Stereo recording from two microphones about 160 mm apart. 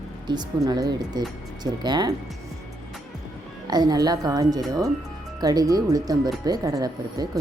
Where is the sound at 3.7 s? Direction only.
25° right (ahead or behind).